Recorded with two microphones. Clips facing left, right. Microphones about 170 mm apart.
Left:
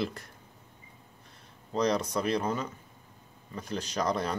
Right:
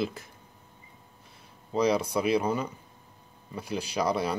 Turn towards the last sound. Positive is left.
turn(degrees=-10)  # may be behind; listen again after turning